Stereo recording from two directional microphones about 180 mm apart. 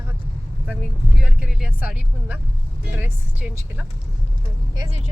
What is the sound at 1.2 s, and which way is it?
Speech, 5° right (ahead or behind).